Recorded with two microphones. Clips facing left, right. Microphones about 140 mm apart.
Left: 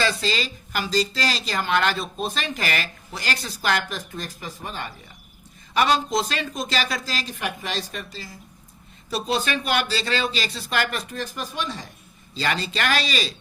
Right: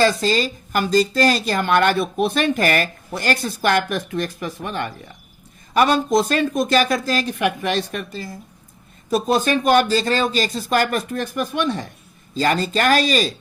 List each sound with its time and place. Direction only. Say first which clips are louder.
0.0 s speech: right 7 dB; 45° right (ahead or behind); by 4.9 s 65° right (ahead or behind)
5.7 s speech: right 5 dB; 50° right (ahead or behind)
12.3 s speech: right 7 dB; 45° right (ahead or behind)